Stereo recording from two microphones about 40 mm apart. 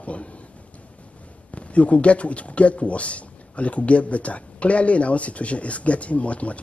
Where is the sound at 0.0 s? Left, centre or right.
Left.